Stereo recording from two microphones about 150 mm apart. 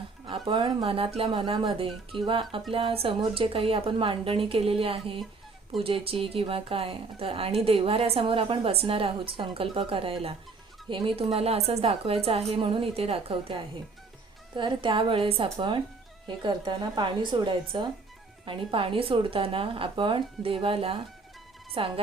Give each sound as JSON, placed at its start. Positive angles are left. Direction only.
{"t": 0.3, "sound": "a woman's voice", "side_deg": -35}